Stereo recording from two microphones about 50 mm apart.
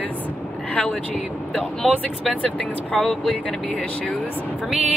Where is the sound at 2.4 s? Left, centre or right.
Left.